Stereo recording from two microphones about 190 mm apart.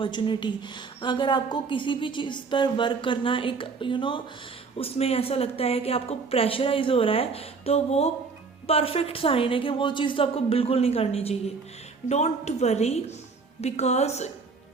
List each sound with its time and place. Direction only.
0.0 s a woman's voice: 25° left (ahead or behind)